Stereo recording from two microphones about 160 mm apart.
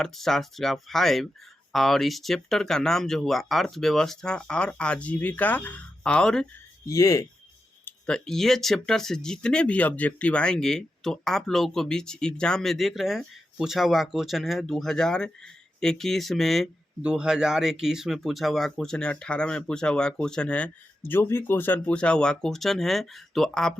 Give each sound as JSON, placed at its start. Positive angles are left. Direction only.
{"t": 0.0, "sound": "speech", "side_deg": 0}
{"t": 6.8, "sound": "speech", "side_deg": 20}
{"t": 7.9, "sound": "speech", "side_deg": 5}